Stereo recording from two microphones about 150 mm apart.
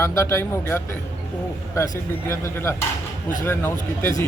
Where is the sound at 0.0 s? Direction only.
15° left (ahead or behind).